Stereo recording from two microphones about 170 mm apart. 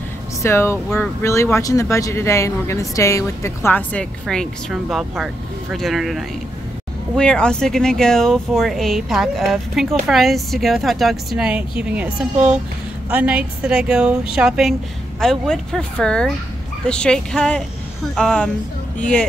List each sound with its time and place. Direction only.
0.4 s speech: 15° left (ahead or behind)